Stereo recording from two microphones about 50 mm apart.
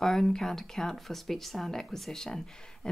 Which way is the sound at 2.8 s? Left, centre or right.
Centre.